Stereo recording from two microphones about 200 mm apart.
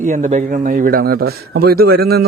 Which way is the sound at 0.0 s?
40° right (ahead or behind).